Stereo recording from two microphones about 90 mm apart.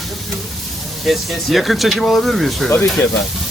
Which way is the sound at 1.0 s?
Centre (ahead or behind).